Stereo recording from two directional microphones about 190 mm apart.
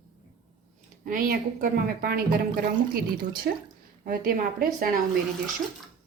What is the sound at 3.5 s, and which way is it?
A woman's voice, 55° right (ahead or behind).